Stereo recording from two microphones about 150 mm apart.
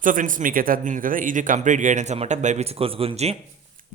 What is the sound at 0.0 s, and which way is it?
A man's voice, 60° right (ahead or behind).